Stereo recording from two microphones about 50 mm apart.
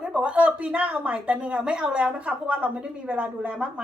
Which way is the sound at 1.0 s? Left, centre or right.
Right.